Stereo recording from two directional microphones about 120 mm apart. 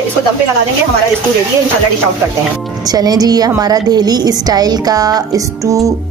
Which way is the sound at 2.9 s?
35° right (ahead or behind).